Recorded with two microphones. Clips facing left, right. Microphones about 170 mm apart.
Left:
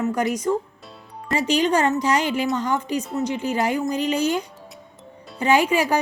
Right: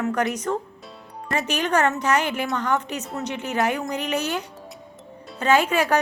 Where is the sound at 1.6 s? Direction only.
10° left (ahead or behind).